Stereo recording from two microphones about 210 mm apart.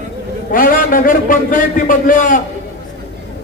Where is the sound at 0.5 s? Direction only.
40° left (ahead or behind).